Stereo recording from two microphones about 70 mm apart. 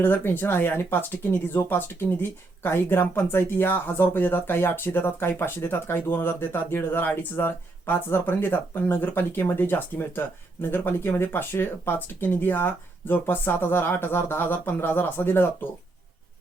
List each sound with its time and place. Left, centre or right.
0.0 s speech: left